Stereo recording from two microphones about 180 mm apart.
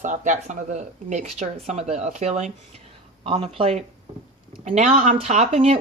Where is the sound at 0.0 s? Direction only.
45° right (ahead or behind).